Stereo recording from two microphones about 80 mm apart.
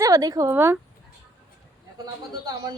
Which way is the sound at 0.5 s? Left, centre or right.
Right.